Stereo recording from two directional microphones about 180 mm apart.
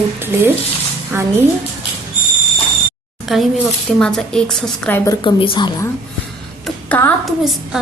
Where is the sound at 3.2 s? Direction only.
Centre (ahead or behind).